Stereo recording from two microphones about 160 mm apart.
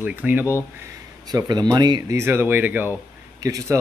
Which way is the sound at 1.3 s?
25° right (ahead or behind).